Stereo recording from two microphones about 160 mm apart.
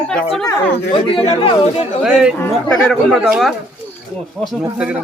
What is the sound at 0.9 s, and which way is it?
Speech, 35° left (ahead or behind).